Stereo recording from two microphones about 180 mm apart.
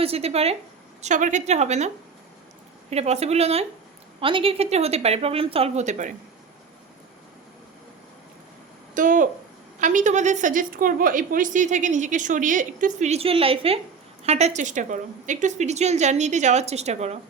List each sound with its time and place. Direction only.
0.0 s a woman's voice: 35° right (ahead or behind)
2.9 s a woman's voice: 35° right (ahead or behind)
9.0 s a woman's voice: 45° right (ahead or behind)